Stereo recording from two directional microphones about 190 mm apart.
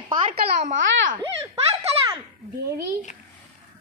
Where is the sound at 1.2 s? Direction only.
15° right (ahead or behind).